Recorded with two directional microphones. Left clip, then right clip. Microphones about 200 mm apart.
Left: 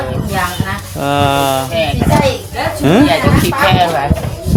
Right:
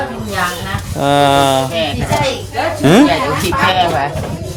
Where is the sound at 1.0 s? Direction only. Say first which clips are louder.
Right 2 dB; 10° right (ahead or behind).